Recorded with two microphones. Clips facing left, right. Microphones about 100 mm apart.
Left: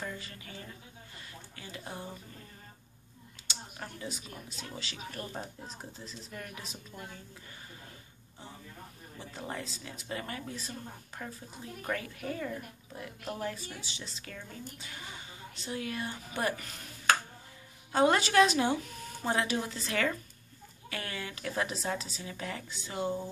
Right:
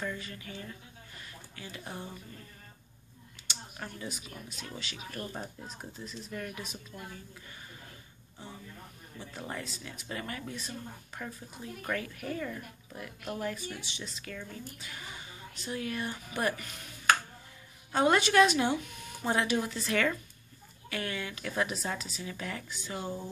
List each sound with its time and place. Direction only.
0.0 s speech: 35° left (ahead or behind)
1.1 s a sound: 35° left (ahead or behind)
3.4 s a sound: 35° left (ahead or behind)
4.6 s speech: 35° left (ahead or behind)
6.9 s a woman's voice: 20° left (ahead or behind)
9.2 s a woman's voice: 35° left (ahead or behind)